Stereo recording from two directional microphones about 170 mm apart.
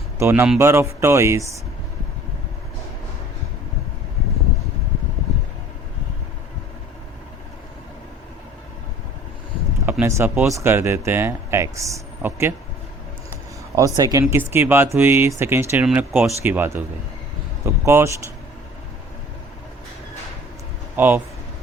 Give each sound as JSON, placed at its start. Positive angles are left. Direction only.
{"t": 0.2, "sound": "speech", "side_deg": -15}
{"t": 10.0, "sound": "speech", "side_deg": -15}
{"t": 13.7, "sound": "speech", "side_deg": -20}
{"t": 17.8, "sound": "speech", "side_deg": -15}
{"t": 20.9, "sound": "speech", "side_deg": -10}